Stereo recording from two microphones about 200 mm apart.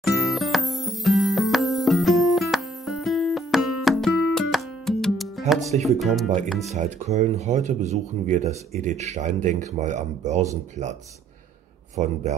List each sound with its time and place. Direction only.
0.0 s music: centre (ahead or behind)
5.8 s speech: centre (ahead or behind)
6.7 s speech: 35° right (ahead or behind)
12.0 s speech: 35° right (ahead or behind)